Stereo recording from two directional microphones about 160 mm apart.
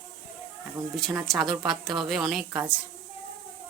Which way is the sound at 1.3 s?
5° right (ahead or behind).